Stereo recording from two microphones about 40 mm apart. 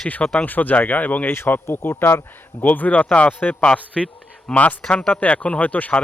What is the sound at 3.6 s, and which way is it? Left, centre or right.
Speech, left.